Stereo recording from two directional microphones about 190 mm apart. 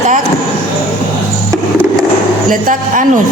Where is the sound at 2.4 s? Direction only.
45° right (ahead or behind).